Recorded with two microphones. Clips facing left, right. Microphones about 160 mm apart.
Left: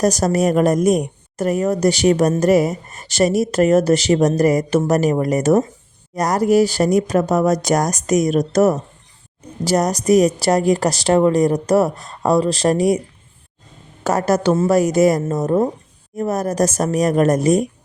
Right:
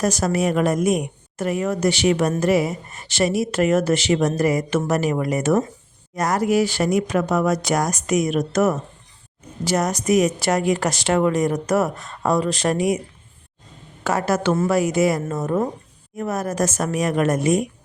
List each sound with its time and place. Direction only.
0.0 s speech: 40° left (ahead or behind)
14.0 s speech: 40° left (ahead or behind)